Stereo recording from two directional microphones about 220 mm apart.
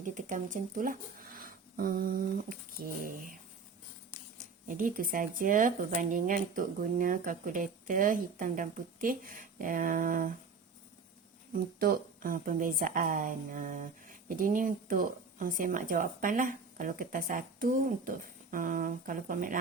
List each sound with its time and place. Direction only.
0.0 s a woman's voice: 35° right (ahead or behind)
4.7 s a woman's voice: 40° right (ahead or behind)
11.5 s a woman's voice: 40° right (ahead or behind)